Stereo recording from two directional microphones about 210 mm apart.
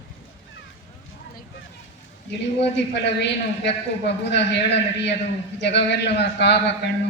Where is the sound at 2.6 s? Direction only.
55° left (ahead or behind).